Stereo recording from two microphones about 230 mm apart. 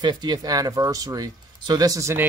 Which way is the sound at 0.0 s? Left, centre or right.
Centre.